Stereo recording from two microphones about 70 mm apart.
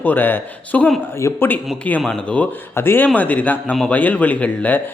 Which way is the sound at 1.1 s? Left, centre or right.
Left.